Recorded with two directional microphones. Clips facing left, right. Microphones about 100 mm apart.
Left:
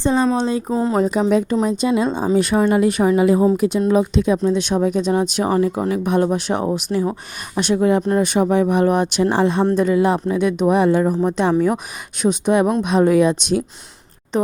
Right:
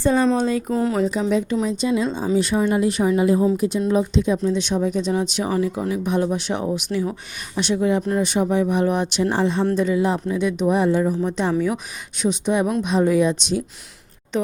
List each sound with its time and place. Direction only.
0.0 s speech: 25° left (ahead or behind)
0.9 s speech: 45° left (ahead or behind); by 3.4 s 85° left
3.6 s speech: 70° left (ahead or behind)
14.3 s speech: 40° left (ahead or behind)